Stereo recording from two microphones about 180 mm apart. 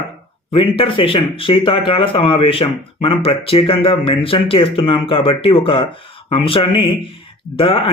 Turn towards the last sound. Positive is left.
turn(degrees=30)  # may be behind; listen again after turning